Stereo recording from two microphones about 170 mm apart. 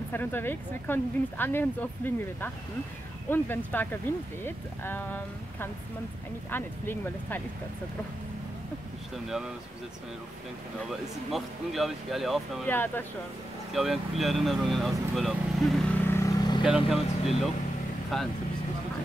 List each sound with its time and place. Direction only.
0.1 s speech: 10° left (ahead or behind)
10.9 s speech: centre (ahead or behind)
12.6 s speech: 10° left (ahead or behind)
13.7 s speech: centre (ahead or behind)
16.1 s vehicle: 20° left (ahead or behind)
16.6 s speech: centre (ahead or behind)